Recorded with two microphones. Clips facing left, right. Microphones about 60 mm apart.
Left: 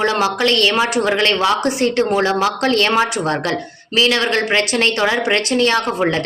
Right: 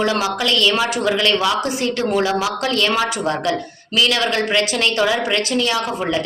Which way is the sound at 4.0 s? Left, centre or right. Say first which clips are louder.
Left 2 dB; left.